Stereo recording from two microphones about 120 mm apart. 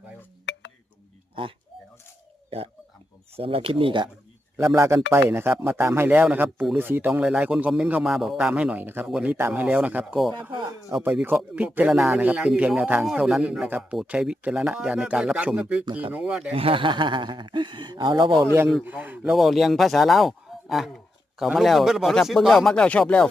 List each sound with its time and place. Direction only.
1.4 s speech: 45° right (ahead or behind)
3.3 s speech: 55° right (ahead or behind)
4.5 s a man's voice: 20° right (ahead or behind); by 10.3 s 5° right (ahead or behind)
10.5 s speech: 35° right (ahead or behind)
11.0 s a man's voice: 15° right (ahead or behind)
16.6 s speech: 50° right (ahead or behind)
18.4 s speech: 20° right (ahead or behind); by 23.3 s 10° left (ahead or behind)